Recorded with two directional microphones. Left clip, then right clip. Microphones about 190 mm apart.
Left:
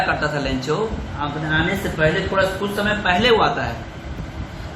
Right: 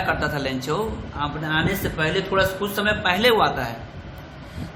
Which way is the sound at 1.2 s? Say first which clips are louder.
Left 2 dB; 50° right (ahead or behind).